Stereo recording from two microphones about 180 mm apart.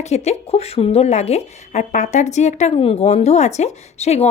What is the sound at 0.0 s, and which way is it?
Speech, 40° left (ahead or behind).